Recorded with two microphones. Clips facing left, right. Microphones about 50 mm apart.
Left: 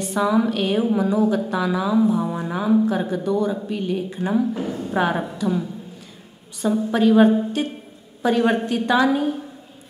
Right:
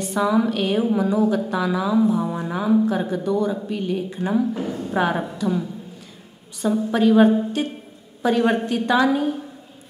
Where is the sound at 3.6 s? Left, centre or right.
Left.